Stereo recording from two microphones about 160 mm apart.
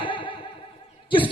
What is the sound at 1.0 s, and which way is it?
Cough, 30° left (ahead or behind).